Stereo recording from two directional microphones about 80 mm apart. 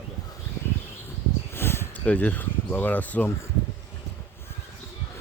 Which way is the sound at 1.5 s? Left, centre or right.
Left.